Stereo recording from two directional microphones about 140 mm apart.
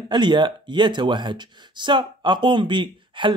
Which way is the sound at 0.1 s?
35° right (ahead or behind).